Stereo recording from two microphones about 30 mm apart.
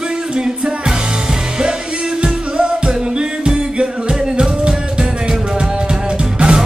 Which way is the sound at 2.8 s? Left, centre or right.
Right.